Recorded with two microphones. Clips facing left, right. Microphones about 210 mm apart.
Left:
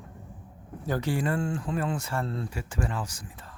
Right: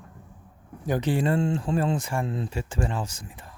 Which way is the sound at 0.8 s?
15° right (ahead or behind).